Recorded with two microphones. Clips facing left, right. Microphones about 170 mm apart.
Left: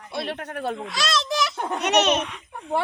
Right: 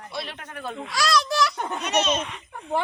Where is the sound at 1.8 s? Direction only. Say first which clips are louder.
Left 4 dB; 70° left (ahead or behind).